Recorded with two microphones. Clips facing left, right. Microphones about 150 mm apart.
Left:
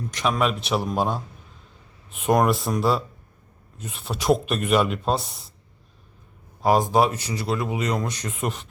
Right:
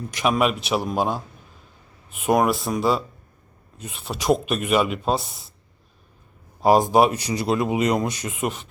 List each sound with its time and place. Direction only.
0.1 s speech: 10° right (ahead or behind)
6.6 s speech: 15° right (ahead or behind)